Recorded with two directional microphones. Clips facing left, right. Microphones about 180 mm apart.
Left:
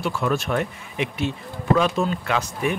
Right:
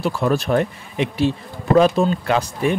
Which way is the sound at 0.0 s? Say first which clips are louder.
Right 4 dB; 35° right (ahead or behind).